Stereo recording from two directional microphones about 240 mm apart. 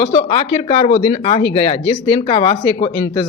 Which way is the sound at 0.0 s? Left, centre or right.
Left.